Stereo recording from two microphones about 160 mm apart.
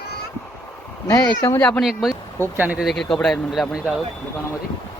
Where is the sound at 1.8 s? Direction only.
Centre (ahead or behind).